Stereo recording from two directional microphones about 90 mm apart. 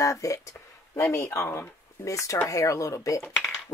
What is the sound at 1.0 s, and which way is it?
Speech, 25° left (ahead or behind).